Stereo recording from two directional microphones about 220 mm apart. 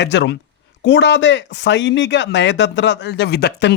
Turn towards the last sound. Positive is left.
turn(degrees=50)  # may be behind; listen again after turning